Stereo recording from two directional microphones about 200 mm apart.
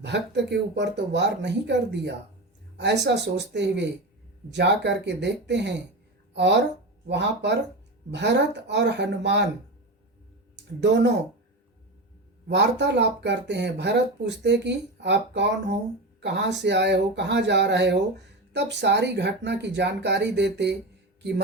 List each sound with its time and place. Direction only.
0.0 s speech: 60° right (ahead or behind)
10.5 s speech: 60° right (ahead or behind)
12.5 s speech: 60° right (ahead or behind)